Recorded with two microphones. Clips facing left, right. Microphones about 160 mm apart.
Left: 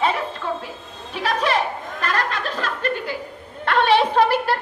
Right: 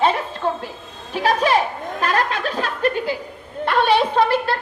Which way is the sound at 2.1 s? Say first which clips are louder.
Right 2 dB; 55° right (ahead or behind).